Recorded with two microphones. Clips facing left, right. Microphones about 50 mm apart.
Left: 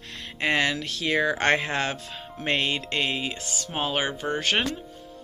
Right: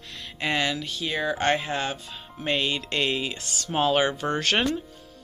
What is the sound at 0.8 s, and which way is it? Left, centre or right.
Speech, left.